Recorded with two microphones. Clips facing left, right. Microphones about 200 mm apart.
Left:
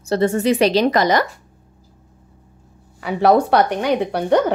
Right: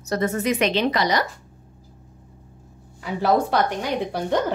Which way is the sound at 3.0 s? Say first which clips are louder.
Left 6 dB; 65° left (ahead or behind).